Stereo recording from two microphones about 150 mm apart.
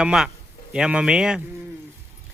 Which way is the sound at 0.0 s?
5° right (ahead or behind).